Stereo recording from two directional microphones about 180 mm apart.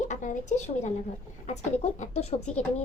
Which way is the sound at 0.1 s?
45° left (ahead or behind).